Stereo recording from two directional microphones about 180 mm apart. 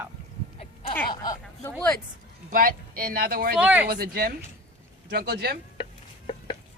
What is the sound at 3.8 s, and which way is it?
Speech, 60° right (ahead or behind).